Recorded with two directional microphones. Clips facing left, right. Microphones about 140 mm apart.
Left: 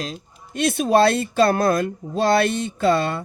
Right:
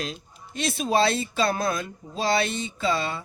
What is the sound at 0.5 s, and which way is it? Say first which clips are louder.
Speech: left 6 dB; 55° left (ahead or behind).